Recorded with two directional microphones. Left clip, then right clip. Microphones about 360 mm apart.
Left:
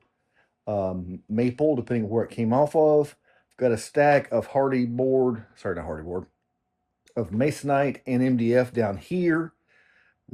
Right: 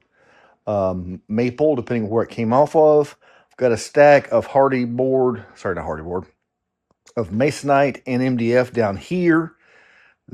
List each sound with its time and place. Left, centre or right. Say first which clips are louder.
0.6 s speech: right 7 dB; right